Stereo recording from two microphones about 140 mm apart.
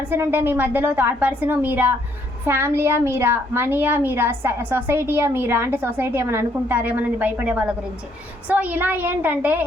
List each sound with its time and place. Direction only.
0.1 s a woman's voice: 15° right (ahead or behind)